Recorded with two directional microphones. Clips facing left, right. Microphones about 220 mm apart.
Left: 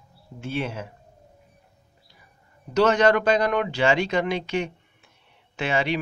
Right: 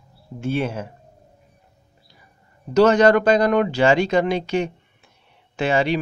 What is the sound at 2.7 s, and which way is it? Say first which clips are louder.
Speech: right 5 dB; 40° right (ahead or behind).